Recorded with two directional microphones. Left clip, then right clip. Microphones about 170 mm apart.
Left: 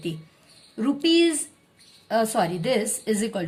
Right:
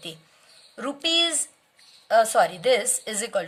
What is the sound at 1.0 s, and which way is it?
A woman's voice, 30° right (ahead or behind).